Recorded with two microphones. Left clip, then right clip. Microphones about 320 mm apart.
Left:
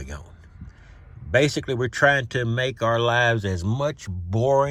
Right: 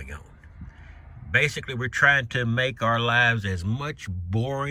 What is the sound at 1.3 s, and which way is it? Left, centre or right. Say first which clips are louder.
Speech: left 3 dB; centre.